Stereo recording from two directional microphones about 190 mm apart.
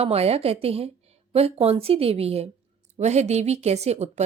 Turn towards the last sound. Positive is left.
turn(degrees=-35)  # may be behind; listen again after turning